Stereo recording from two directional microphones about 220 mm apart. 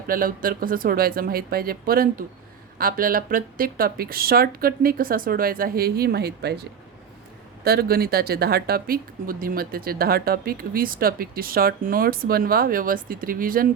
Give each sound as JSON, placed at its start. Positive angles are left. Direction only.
{"t": 0.1, "sound": "speech", "side_deg": -40}